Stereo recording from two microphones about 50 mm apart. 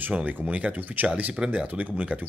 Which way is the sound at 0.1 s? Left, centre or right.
Right.